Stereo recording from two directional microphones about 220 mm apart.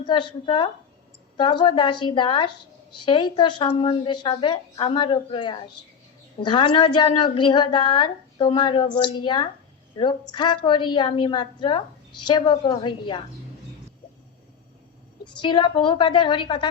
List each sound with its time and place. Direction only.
0.0 s speech: 20° left (ahead or behind)
15.4 s speech: 20° left (ahead or behind)